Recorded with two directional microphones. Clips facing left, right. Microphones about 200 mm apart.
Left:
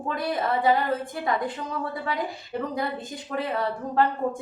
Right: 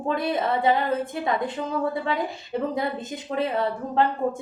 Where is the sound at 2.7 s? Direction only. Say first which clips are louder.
Right 2 dB; 25° right (ahead or behind).